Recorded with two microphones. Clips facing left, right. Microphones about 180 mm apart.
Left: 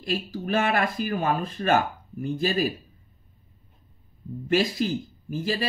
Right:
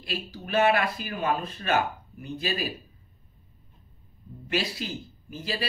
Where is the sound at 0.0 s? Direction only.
45° left (ahead or behind).